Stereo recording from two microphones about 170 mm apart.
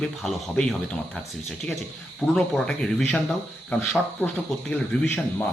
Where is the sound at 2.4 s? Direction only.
5° left (ahead or behind).